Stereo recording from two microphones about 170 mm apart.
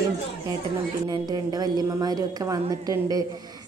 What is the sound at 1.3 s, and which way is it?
A woman's voice, 25° right (ahead or behind).